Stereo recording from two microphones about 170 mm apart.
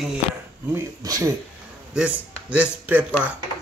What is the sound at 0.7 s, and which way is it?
Speech, 20° right (ahead or behind).